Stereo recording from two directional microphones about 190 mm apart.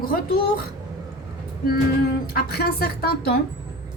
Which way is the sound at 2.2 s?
55° left (ahead or behind).